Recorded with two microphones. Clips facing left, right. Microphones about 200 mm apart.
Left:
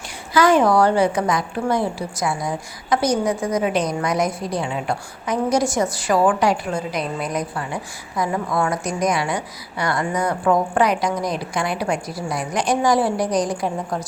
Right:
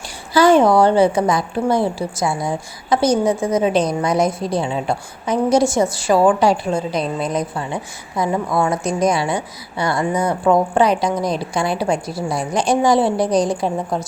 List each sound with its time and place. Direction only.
0.3 s a woman's voice: 30° right (ahead or behind)